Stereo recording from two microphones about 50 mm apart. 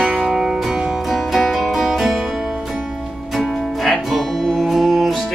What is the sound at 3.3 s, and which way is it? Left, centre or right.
Music, centre.